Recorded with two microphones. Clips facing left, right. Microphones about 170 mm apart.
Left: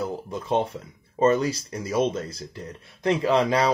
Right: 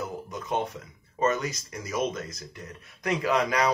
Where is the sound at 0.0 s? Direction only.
30° left (ahead or behind).